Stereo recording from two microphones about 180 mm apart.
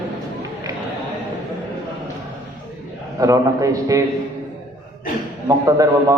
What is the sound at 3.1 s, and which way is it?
Speech, 20° right (ahead or behind).